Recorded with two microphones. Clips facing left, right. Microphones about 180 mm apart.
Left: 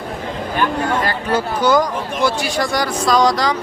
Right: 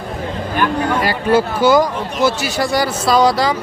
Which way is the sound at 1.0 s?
10° right (ahead or behind).